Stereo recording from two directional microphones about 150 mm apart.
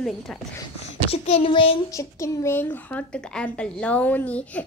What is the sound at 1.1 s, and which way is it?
Speech, 40° left (ahead or behind).